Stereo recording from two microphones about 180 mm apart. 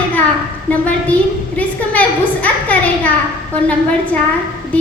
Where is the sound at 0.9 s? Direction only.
10° left (ahead or behind).